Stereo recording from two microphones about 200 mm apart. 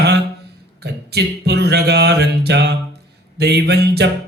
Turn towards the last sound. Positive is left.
turn(degrees=-55)  # may be behind; listen again after turning